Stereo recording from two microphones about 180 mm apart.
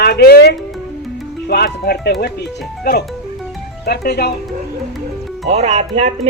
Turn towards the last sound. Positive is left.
turn(degrees=-35)  # may be behind; listen again after turning